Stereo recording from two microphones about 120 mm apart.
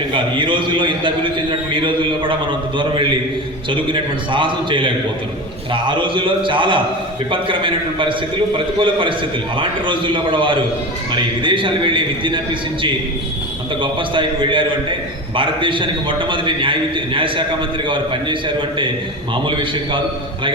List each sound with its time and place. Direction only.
0.1 s a man's voice: 45° right (ahead or behind)
13.8 s a man's voice: 45° right (ahead or behind)